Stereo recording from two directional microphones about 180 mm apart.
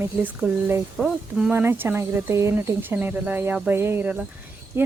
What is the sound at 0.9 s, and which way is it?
Speech, centre (ahead or behind).